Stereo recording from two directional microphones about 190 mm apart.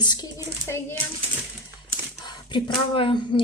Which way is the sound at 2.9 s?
25° left (ahead or behind).